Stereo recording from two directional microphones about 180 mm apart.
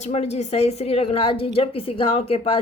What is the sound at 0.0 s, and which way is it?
Speech, 35° left (ahead or behind).